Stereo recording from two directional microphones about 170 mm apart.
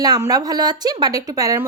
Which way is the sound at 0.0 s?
20° right (ahead or behind).